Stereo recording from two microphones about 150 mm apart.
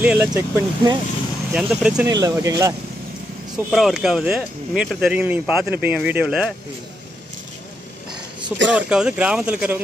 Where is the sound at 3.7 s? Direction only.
5° right (ahead or behind).